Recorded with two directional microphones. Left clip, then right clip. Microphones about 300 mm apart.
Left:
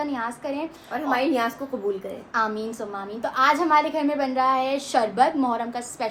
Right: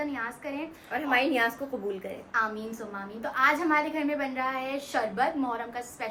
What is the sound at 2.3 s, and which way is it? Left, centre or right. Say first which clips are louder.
A woman's voice: left 4 dB; centre.